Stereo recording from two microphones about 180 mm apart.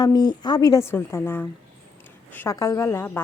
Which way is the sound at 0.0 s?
25° left (ahead or behind).